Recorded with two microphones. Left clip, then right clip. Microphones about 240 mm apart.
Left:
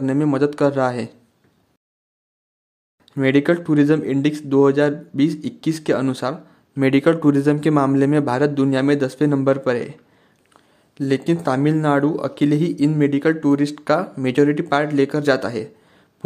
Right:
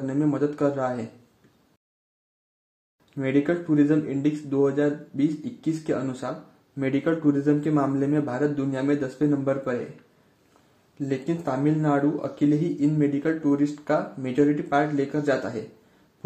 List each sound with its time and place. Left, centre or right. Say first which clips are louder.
0.0 s speech: left 6 dB; left
3.2 s speech: left 7 dB; left
11.0 s speech: left 8 dB; left